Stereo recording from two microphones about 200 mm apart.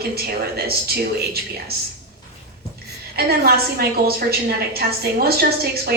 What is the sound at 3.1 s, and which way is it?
A woman's voice, 50° right (ahead or behind).